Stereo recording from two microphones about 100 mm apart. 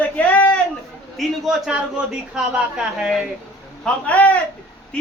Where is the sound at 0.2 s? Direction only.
15° left (ahead or behind).